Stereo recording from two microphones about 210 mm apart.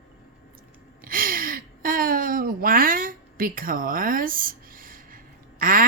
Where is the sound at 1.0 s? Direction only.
40° right (ahead or behind).